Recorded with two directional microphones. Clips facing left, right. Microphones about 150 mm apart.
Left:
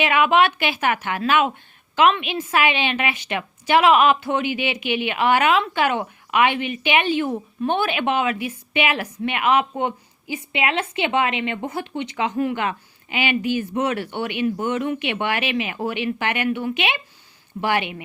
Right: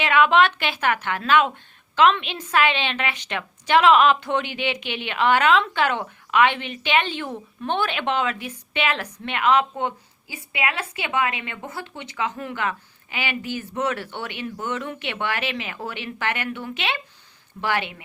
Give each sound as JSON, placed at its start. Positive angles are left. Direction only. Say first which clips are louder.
{"t": 0.0, "sound": "a woman's voice", "louder": "even", "side_deg": 10}